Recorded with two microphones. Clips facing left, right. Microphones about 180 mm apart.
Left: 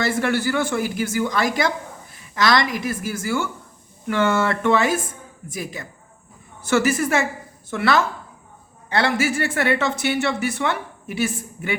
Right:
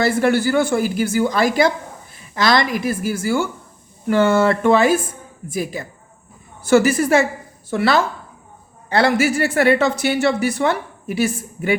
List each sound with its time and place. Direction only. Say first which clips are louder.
0.0 s a woman's voice: right 5 dB; 35° right (ahead or behind)